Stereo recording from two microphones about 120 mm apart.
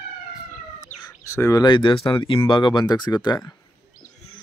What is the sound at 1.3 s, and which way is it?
Speech, 30° left (ahead or behind).